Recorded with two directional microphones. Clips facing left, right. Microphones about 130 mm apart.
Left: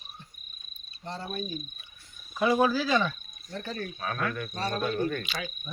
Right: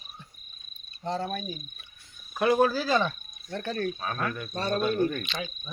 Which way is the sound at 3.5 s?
65° right (ahead or behind).